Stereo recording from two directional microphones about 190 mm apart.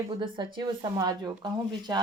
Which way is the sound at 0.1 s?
25° right (ahead or behind).